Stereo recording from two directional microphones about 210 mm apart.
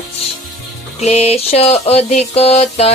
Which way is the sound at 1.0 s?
30° left (ahead or behind).